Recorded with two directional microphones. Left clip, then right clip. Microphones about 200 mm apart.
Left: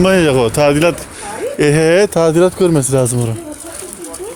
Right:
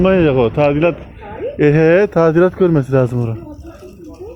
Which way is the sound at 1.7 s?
30° left (ahead or behind).